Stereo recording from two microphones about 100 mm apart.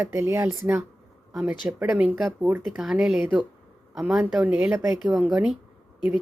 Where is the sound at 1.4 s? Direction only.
10° right (ahead or behind).